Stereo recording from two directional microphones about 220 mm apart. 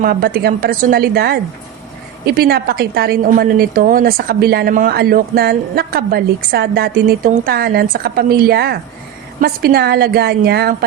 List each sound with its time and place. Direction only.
0.0 s a woman's voice: 45° right (ahead or behind)